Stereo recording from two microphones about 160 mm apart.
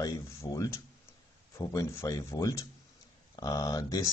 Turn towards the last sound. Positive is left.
turn(degrees=20)  # may be behind; listen again after turning